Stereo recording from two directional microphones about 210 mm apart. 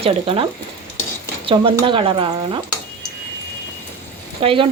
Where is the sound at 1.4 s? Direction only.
25° right (ahead or behind).